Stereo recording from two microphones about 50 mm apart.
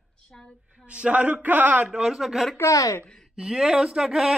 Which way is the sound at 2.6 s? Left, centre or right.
Left.